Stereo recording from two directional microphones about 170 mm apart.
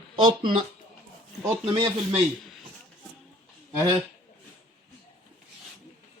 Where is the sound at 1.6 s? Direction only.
30° right (ahead or behind).